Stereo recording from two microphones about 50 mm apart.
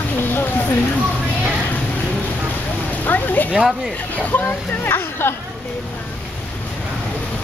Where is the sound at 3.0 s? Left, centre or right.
Left.